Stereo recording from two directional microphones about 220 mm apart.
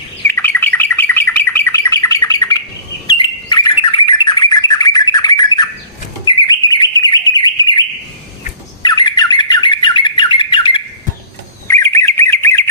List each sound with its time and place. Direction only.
0.3 s bird: 10° left (ahead or behind)